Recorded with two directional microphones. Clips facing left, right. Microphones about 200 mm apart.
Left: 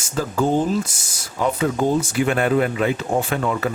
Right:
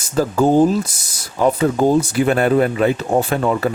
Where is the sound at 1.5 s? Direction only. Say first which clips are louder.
Right 5 dB; 35° right (ahead or behind).